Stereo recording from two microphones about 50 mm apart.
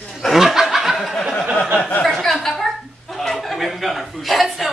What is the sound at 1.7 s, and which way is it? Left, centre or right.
Speech, left.